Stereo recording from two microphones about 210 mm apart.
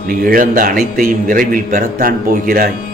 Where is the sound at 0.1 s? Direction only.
45° right (ahead or behind).